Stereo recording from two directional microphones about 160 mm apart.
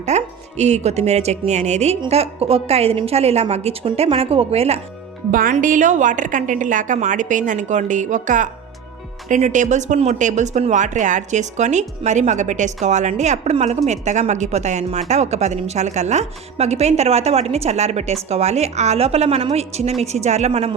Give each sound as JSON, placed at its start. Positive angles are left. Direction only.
{"t": 0.0, "sound": "a woman's voice", "side_deg": -45}
{"t": 5.3, "sound": "speech", "side_deg": -60}